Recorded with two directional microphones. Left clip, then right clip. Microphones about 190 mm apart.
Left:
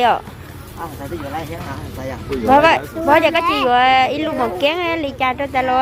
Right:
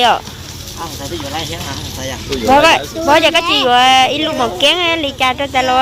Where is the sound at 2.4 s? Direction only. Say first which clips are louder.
Right 3 dB; 5° left (ahead or behind).